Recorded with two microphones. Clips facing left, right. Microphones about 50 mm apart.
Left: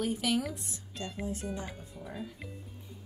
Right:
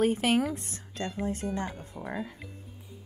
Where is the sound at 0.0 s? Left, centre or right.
Right.